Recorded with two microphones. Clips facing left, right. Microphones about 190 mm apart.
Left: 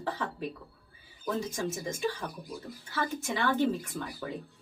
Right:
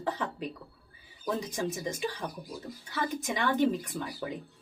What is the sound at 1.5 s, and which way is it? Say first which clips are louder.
Speech: right 1 dB; 15° right (ahead or behind).